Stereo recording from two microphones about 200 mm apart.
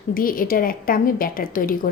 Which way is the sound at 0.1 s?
45° left (ahead or behind).